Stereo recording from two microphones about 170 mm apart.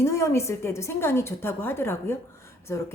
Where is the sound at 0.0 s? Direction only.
15° left (ahead or behind).